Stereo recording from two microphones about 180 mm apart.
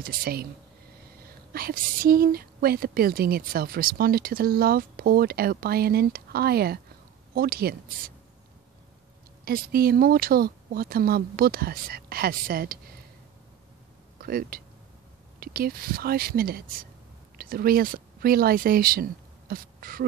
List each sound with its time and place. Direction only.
0.0 s speech: 55° right (ahead or behind)
1.5 s a woman's voice: 55° right (ahead or behind)
9.4 s a woman's voice: 55° right (ahead or behind)
14.1 s a woman's voice: 55° right (ahead or behind)